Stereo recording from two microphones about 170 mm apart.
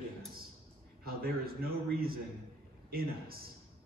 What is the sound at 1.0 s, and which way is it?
A man's voice, 60° right (ahead or behind).